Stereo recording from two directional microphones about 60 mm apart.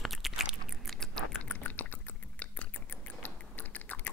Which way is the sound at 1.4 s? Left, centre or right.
Left.